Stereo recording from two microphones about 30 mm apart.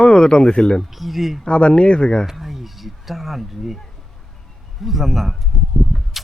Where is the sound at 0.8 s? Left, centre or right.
Centre.